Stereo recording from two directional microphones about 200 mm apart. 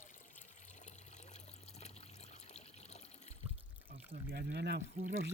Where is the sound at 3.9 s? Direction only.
55° right (ahead or behind).